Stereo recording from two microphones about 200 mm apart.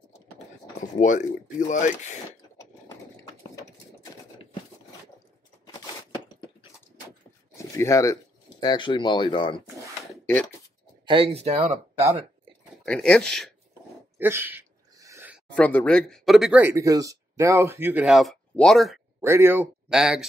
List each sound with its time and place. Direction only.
1.0 s speech: 40° left (ahead or behind)
3.5 s sewing machine: 15° left (ahead or behind)
7.5 s speech: 15° left (ahead or behind)
11.3 s speech: 30° right (ahead or behind)
12.8 s speech: 5° left (ahead or behind)
14.1 s a sound: 10° right (ahead or behind)
15.5 s speech: 5° left (ahead or behind)
19.2 s speech: 10° right (ahead or behind)